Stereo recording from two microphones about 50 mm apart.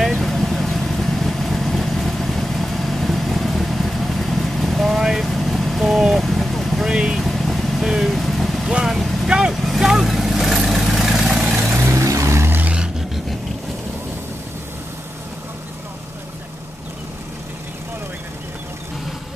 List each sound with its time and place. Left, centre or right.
0.0 s vehicle: centre
6.9 s vehicle: centre
7.2 s vehicle: centre
7.8 s vehicle: centre
8.2 s vehicle: centre
8.6 s vehicle: centre
8.9 s vehicle: centre
9.3 s vehicle: centre
11.9 s vehicle: right